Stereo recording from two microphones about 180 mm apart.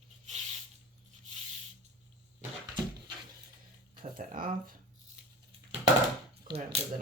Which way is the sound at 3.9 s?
50° right (ahead or behind).